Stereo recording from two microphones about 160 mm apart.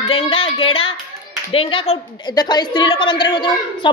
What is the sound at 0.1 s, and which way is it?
A woman's voice, 35° left (ahead or behind).